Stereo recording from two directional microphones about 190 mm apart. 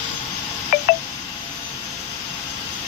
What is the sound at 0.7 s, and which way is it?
Telephone dialing, 50° left (ahead or behind).